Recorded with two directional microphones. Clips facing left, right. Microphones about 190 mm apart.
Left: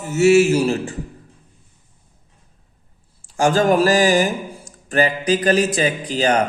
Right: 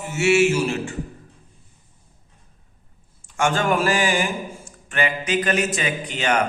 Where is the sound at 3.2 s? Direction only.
35° left (ahead or behind).